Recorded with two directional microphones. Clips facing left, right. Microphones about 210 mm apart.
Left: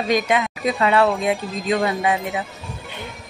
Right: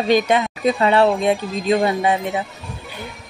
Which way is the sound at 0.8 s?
30° right (ahead or behind).